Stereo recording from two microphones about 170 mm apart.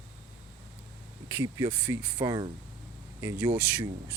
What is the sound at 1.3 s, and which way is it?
Speech, 15° right (ahead or behind).